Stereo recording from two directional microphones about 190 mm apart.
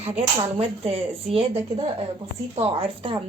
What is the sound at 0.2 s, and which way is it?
Speech, 30° right (ahead or behind).